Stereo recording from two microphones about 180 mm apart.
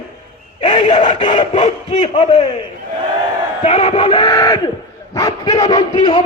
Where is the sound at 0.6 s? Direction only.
25° left (ahead or behind).